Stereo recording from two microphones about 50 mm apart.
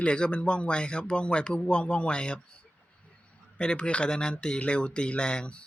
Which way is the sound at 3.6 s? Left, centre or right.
Left.